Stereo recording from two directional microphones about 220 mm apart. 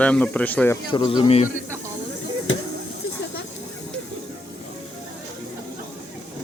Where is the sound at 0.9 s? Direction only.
20° left (ahead or behind).